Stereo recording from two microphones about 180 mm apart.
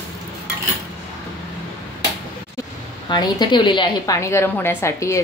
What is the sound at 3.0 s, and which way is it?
A woman's voice, 25° left (ahead or behind).